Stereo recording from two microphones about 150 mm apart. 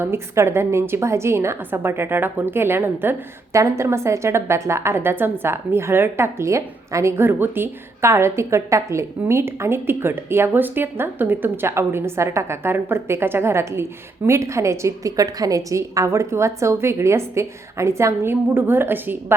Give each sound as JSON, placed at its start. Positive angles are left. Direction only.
{"t": 0.0, "sound": "a woman's voice", "side_deg": -15}